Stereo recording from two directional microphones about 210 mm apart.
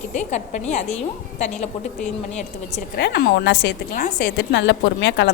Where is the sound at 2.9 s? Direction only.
50° left (ahead or behind).